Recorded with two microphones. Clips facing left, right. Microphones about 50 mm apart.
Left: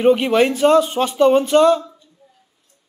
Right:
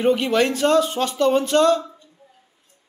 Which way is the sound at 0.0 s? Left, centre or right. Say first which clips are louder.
Left 4 dB; centre.